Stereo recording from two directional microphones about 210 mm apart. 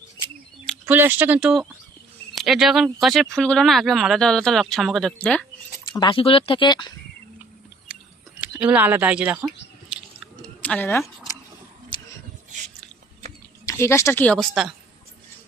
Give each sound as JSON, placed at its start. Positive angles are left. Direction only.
{"t": 0.9, "sound": "speech", "side_deg": -10}
{"t": 5.9, "sound": "speech", "side_deg": 25}
{"t": 8.4, "sound": "speech", "side_deg": -5}
{"t": 9.9, "sound": "squish", "side_deg": -5}
{"t": 10.4, "sound": "a sound", "side_deg": 5}
{"t": 13.7, "sound": "speech", "side_deg": 15}